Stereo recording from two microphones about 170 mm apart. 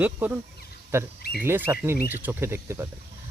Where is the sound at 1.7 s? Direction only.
15° right (ahead or behind).